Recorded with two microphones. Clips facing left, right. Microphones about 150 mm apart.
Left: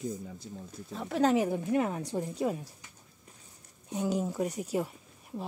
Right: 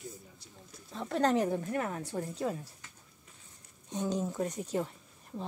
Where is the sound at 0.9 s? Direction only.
5° left (ahead or behind).